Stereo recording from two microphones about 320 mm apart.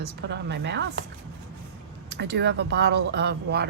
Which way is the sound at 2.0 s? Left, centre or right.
Right.